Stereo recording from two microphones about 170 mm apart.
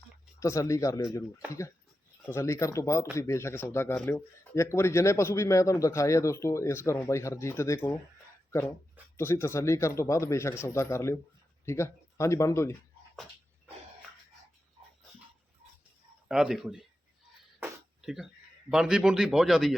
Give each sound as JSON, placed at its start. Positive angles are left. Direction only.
{"t": 0.3, "sound": "speech", "side_deg": 20}
{"t": 2.2, "sound": "speech", "side_deg": 15}
{"t": 9.1, "sound": "speech", "side_deg": 15}
{"t": 16.3, "sound": "a man's voice", "side_deg": -5}
{"t": 17.6, "sound": "a sound", "side_deg": -5}
{"t": 18.7, "sound": "a man's voice", "side_deg": -5}